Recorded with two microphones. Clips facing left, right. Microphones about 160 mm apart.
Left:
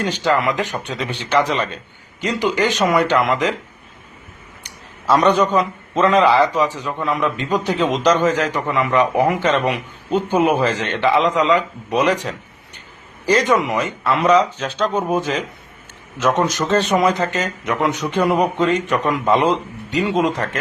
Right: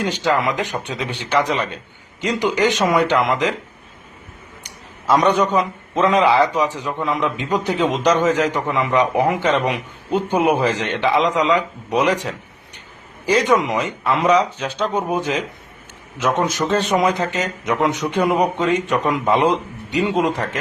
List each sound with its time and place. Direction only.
0.3 s a man's voice: 15° right (ahead or behind)
5.0 s a man's voice: 10° right (ahead or behind)
13.2 s a man's voice: 10° right (ahead or behind)
16.9 s a man's voice: 10° right (ahead or behind)